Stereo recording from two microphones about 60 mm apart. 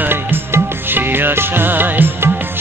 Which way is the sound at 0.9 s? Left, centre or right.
Right.